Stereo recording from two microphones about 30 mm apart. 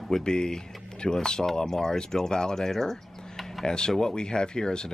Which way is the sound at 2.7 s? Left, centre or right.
Centre.